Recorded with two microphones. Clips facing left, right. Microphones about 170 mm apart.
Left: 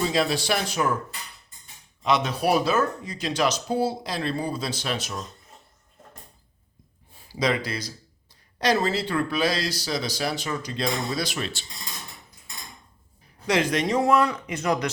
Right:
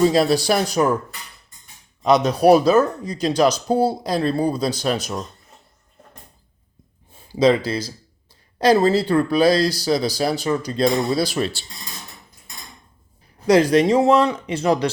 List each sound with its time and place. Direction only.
0.0 s speech: 40° right (ahead or behind)
2.0 s speech: 40° right (ahead or behind)
7.3 s speech: 30° right (ahead or behind)
13.5 s speech: 35° right (ahead or behind)